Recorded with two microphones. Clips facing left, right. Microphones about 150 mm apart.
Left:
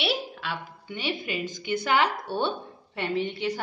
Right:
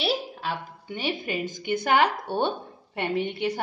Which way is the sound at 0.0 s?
40° right (ahead or behind).